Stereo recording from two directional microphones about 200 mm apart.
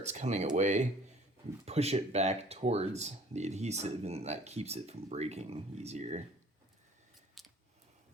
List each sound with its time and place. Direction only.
0.0 s speech: 35° right (ahead or behind)
7.4 s scissors: centre (ahead or behind)